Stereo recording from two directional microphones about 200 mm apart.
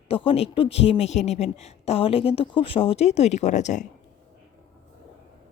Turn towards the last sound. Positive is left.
turn(degrees=35)  # may be behind; listen again after turning